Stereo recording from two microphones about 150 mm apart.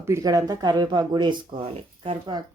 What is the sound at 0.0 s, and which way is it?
Speech, 20° right (ahead or behind).